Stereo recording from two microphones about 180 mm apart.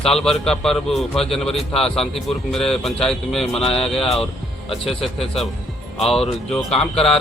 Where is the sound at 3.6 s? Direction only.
30° left (ahead or behind).